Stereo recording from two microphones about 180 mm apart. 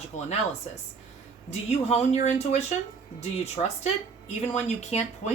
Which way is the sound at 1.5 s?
40° left (ahead or behind).